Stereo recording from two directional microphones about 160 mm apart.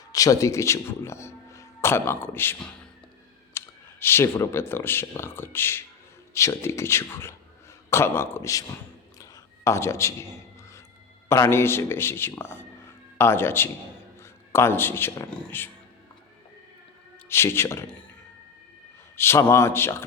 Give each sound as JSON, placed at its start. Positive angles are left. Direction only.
{"t": 0.1, "sound": "speech", "side_deg": 20}
{"t": 3.6, "sound": "clicking", "side_deg": 15}
{"t": 4.0, "sound": "speech", "side_deg": 15}
{"t": 9.1, "sound": "a sound", "side_deg": 20}
{"t": 11.3, "sound": "a man's voice", "side_deg": 15}
{"t": 17.2, "sound": "speech", "side_deg": 15}
{"t": 19.1, "sound": "speech", "side_deg": 15}